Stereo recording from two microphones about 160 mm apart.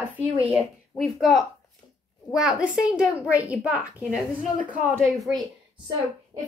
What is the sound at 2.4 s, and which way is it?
A child's voice, 5° right (ahead or behind).